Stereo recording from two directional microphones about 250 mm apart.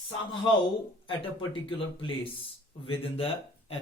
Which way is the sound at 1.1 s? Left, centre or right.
Left.